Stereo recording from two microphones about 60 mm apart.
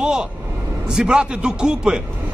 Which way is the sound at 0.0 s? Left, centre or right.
Centre.